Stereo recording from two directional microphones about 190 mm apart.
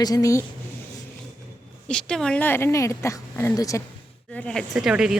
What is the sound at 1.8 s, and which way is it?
Speech, 5° left (ahead or behind).